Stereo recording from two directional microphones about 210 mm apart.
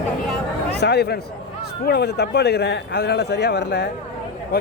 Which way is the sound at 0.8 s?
50° left (ahead or behind).